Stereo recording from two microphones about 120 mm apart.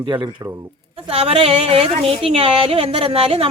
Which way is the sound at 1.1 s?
55° right (ahead or behind).